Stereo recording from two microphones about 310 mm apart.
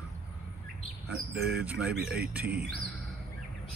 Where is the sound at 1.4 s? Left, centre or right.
Centre.